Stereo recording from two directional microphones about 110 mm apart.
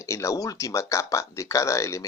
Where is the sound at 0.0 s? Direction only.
25° left (ahead or behind).